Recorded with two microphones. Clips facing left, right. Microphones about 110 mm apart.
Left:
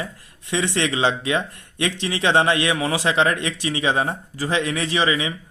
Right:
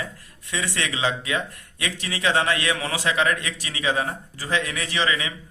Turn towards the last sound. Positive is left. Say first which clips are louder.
# left 4 dB
turn(degrees=20)  # may be behind; listen again after turning